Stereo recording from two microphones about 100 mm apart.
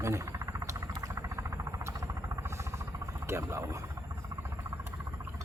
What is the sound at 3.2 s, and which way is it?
Speech, 25° right (ahead or behind).